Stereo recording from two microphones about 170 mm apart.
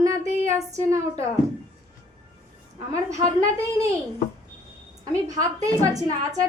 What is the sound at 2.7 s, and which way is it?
A woman's voice, 20° right (ahead or behind).